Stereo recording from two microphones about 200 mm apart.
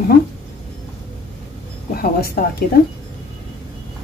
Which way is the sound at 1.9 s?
50° left (ahead or behind).